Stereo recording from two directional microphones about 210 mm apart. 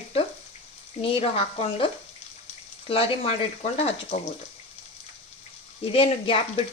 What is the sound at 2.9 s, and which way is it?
Speech, 30° left (ahead or behind).